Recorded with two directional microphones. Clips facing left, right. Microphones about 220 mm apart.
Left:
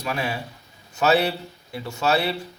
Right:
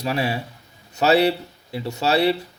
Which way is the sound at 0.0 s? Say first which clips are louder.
Right 4 dB; 25° right (ahead or behind).